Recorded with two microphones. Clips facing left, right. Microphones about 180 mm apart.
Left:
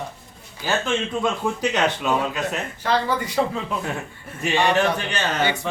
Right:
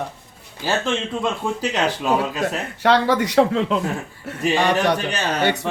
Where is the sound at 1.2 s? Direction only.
30° right (ahead or behind).